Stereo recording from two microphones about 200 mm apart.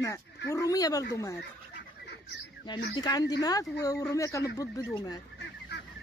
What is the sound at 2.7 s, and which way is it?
A woman's voice, 20° left (ahead or behind).